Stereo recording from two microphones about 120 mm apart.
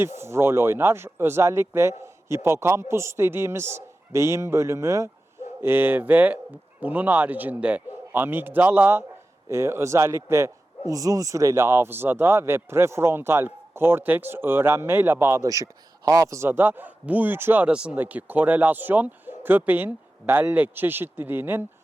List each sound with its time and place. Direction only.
0.2 s speech: 20° right (ahead or behind)